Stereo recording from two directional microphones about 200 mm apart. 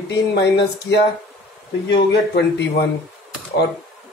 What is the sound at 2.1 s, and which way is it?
Speech, 55° left (ahead or behind).